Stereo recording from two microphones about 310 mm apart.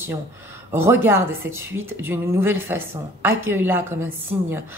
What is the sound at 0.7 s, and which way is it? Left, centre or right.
A woman's voice, centre.